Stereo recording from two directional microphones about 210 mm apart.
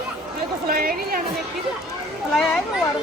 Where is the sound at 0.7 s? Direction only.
45° right (ahead or behind).